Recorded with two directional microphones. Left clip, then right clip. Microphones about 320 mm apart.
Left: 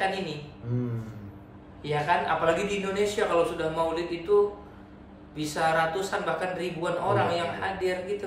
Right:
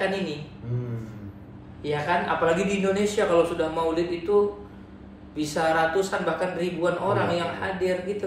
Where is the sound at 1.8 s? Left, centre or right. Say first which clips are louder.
Right 1 dB; centre.